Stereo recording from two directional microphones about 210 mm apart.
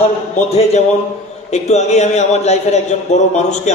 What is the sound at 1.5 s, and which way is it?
A man's voice, 35° left (ahead or behind).